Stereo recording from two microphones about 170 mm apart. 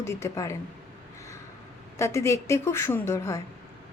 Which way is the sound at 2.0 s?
15° left (ahead or behind).